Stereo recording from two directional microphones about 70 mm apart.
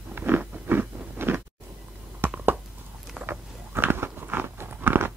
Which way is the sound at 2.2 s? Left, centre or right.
Right.